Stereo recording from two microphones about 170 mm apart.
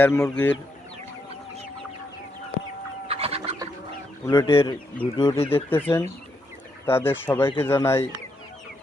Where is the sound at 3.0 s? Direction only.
35° right (ahead or behind).